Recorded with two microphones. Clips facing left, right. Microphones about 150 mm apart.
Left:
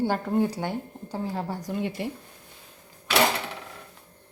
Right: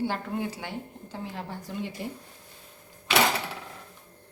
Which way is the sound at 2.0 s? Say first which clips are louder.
Left 4 dB; 75° left (ahead or behind).